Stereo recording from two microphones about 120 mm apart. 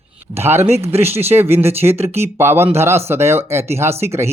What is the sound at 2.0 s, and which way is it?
Speech, 60° right (ahead or behind).